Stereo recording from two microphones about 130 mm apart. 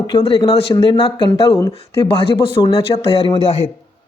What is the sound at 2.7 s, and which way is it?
Speech, 50° left (ahead or behind).